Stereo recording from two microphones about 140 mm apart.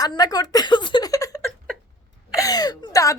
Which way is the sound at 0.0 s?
30° left (ahead or behind).